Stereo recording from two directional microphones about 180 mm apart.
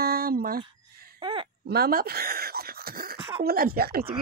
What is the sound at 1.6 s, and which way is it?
Speech, 60° right (ahead or behind).